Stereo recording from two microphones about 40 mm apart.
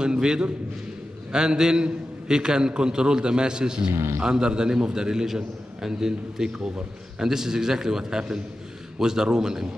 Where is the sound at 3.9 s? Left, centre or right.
Right.